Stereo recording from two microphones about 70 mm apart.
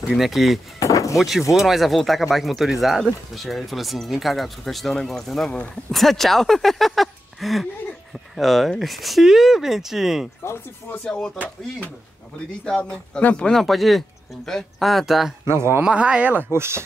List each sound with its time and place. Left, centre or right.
0.1 s speech: centre
0.7 s a sound: left
1.1 s speech: centre
10.4 s speech: left
11.1 s a man's voice: centre
12.6 s a man's voice: centre
13.5 s speech: centre
15.4 s speech: right
15.8 s speech: centre
16.5 s speech: right